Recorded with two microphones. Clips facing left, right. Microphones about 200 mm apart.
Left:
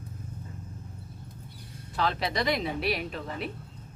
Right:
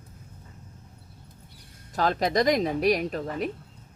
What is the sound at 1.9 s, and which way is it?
A woman's voice, 45° right (ahead or behind).